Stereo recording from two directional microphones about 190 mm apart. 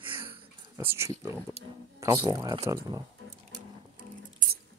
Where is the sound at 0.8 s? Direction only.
15° right (ahead or behind).